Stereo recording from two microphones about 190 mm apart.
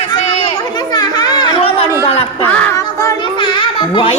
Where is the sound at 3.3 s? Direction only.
25° left (ahead or behind).